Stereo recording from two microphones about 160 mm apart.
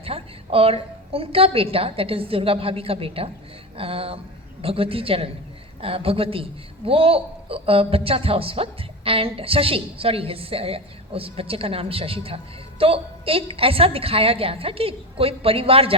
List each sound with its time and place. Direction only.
0.0 s a man's voice: 35° right (ahead or behind)